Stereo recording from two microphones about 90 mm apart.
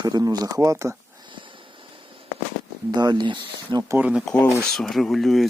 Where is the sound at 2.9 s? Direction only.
50° right (ahead or behind).